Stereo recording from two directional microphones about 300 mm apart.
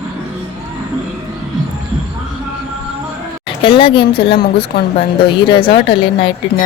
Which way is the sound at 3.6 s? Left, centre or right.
Centre.